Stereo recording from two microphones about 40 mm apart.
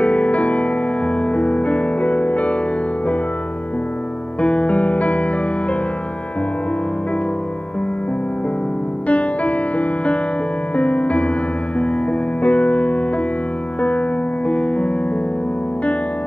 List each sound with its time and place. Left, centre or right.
0.0 s music: left
4.4 s music: left
9.0 s music: left